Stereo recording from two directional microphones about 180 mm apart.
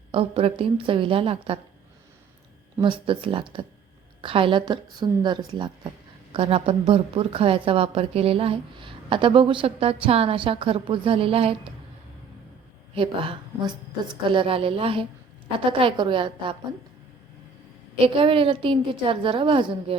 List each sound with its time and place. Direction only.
0.1 s a woman's voice: 30° right (ahead or behind)
2.7 s a woman's voice: 25° right (ahead or behind)
12.9 s a woman's voice: 30° right (ahead or behind)
18.0 s a woman's voice: 30° right (ahead or behind)